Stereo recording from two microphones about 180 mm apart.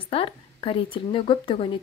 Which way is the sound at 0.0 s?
30° left (ahead or behind).